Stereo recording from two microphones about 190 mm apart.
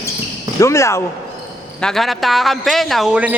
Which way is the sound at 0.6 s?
15° left (ahead or behind).